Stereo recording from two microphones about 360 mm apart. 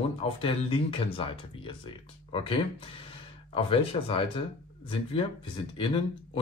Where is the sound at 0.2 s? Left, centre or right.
Centre.